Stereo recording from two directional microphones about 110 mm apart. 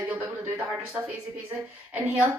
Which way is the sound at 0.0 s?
20° right (ahead or behind).